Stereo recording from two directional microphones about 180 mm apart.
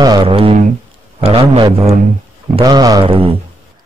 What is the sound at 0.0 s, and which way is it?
A man's voice, 25° right (ahead or behind).